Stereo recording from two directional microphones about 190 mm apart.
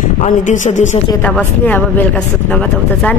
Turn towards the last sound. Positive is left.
turn(degrees=5)  # may be behind; listen again after turning